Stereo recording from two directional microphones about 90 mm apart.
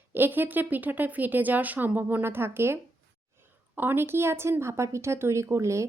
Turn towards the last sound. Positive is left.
turn(degrees=-35)  # may be behind; listen again after turning